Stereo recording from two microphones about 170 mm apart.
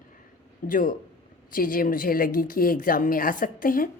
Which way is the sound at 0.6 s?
55° left (ahead or behind).